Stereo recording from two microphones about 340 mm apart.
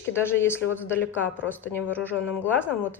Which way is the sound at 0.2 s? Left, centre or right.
Centre.